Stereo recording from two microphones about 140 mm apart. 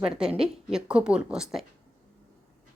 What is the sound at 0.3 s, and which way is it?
Speech, 5° right (ahead or behind).